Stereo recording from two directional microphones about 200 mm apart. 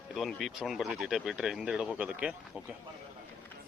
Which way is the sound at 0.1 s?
Centre (ahead or behind).